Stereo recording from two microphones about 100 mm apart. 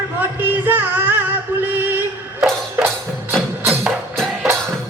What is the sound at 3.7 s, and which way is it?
Music, centre (ahead or behind).